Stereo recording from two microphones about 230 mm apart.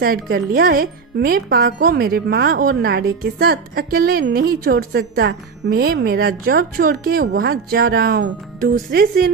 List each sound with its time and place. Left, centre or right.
0.3 s speech: right